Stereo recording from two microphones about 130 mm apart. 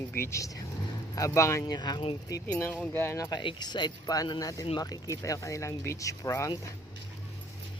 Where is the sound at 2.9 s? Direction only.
20° left (ahead or behind).